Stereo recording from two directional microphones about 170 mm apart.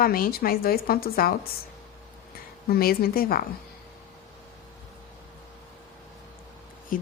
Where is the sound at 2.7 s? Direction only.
60° left (ahead or behind).